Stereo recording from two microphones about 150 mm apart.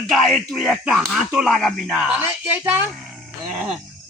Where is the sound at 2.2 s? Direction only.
15° right (ahead or behind).